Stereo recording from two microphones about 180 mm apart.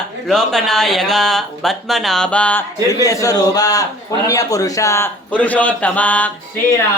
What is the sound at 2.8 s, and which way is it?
A man's voice, 20° left (ahead or behind).